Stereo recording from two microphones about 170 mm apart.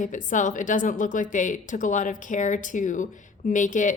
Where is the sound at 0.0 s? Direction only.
50° left (ahead or behind).